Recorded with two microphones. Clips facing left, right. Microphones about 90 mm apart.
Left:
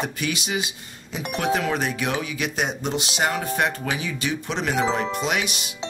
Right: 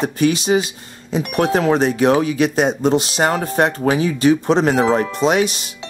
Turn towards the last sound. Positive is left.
turn(degrees=-35)  # may be behind; listen again after turning